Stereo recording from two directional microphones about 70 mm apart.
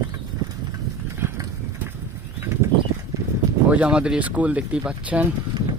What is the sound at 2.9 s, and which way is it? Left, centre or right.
Horse, right.